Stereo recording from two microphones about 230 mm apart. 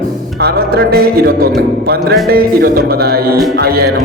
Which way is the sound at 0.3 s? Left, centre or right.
Right.